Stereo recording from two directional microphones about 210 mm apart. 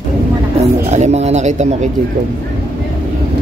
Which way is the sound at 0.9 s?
30° right (ahead or behind).